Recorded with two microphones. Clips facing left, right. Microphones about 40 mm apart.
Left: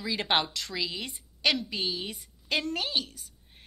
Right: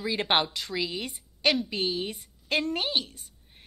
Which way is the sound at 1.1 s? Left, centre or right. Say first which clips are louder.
Right 2 dB; right.